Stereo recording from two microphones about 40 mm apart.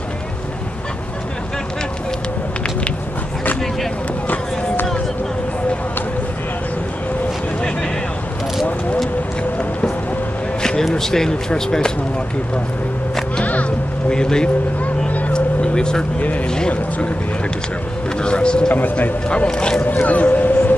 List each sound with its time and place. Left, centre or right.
9.4 s music: left
10.6 s a sound: centre
11.0 s speech: centre
13.4 s music: left
14.0 s speech: centre
15.0 s vehicle: left
15.3 s vehicle: left
16.4 s speech: left
18.2 s speech: left
18.7 s a man's voice: left
19.2 s speech: left
19.8 s speech: left